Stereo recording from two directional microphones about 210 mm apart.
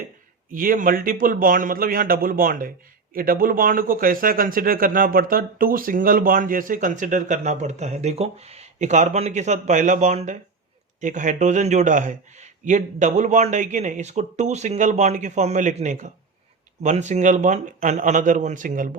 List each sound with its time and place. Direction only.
0.5 s speech: 40° right (ahead or behind)